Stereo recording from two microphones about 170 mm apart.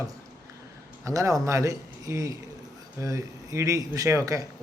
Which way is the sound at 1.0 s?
20° right (ahead or behind).